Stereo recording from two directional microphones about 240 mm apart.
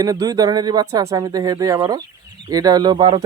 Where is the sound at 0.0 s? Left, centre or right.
Centre.